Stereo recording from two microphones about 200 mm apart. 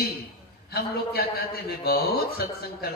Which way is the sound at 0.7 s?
50° left (ahead or behind).